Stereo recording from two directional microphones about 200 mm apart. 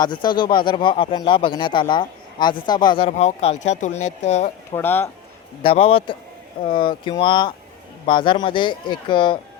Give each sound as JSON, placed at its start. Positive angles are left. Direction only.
{"t": 0.0, "sound": "speech", "side_deg": 20}
{"t": 3.1, "sound": "speech", "side_deg": 35}
{"t": 4.7, "sound": "speech", "side_deg": 10}
{"t": 5.6, "sound": "speech", "side_deg": 25}